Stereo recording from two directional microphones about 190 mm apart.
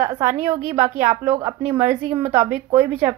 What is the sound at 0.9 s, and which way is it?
A woman's voice, 30° right (ahead or behind).